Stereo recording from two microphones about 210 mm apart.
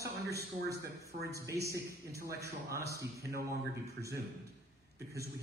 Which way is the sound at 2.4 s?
50° right (ahead or behind).